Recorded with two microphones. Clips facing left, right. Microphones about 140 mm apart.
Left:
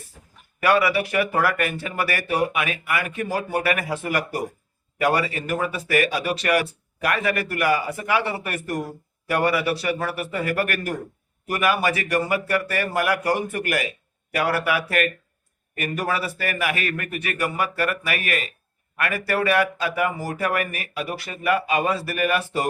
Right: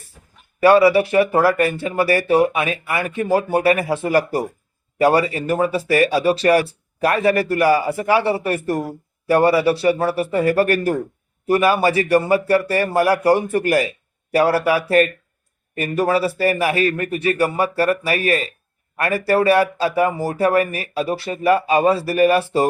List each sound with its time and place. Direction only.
0.6 s speech: 30° right (ahead or behind)